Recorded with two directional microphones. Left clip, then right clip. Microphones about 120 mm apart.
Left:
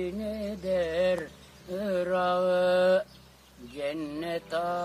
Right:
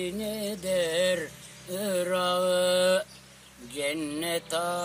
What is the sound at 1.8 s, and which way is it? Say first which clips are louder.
Mantra: even; 15° right (ahead or behind).